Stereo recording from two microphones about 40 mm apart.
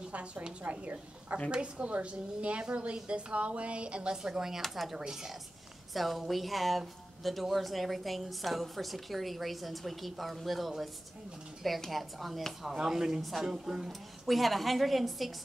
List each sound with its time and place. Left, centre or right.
0.1 s a woman's voice: right
4.2 s speech: centre
4.6 s a woman's voice: centre
4.9 s a woman's voice: centre
11.9 s a woman's voice: centre
13.2 s a woman's voice: centre
13.5 s speech: centre
14.3 s a woman's voice: centre